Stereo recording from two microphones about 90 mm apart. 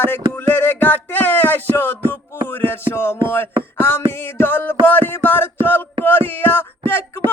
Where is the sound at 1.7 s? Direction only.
20° left (ahead or behind).